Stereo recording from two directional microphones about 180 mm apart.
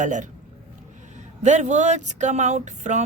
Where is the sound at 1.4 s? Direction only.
40° right (ahead or behind).